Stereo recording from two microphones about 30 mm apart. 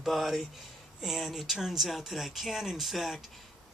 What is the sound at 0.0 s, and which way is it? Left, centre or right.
Speech, centre.